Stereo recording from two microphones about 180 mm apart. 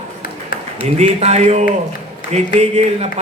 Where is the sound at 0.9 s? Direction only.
35° right (ahead or behind).